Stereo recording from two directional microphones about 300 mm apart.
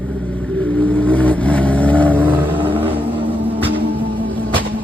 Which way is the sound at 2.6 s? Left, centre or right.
Centre.